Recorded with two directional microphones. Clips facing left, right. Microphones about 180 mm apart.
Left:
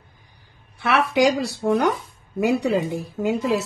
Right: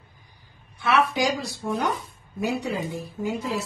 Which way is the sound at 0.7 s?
70° left (ahead or behind).